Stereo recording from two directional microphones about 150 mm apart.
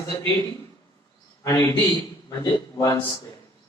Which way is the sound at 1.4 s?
20° left (ahead or behind).